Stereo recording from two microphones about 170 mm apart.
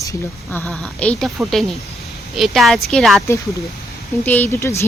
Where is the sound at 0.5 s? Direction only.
10° left (ahead or behind).